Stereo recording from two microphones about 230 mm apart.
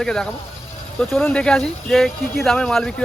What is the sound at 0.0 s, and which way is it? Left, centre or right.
Speech, centre.